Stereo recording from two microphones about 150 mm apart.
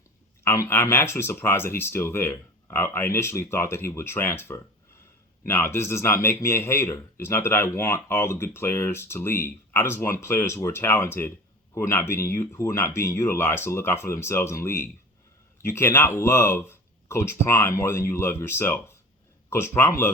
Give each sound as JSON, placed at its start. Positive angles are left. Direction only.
{"t": 0.4, "sound": "a man's voice", "side_deg": 20}